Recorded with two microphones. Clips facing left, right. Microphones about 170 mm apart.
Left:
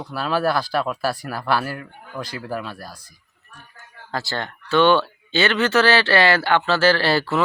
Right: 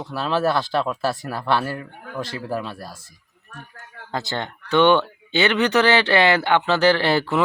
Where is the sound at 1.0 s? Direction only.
25° right (ahead or behind).